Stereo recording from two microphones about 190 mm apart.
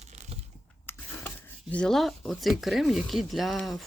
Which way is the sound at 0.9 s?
10° left (ahead or behind).